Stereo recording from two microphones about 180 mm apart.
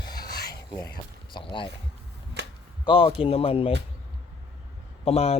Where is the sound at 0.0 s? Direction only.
20° left (ahead or behind).